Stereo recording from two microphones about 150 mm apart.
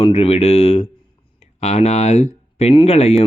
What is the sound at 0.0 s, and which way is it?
Speech, 40° left (ahead or behind).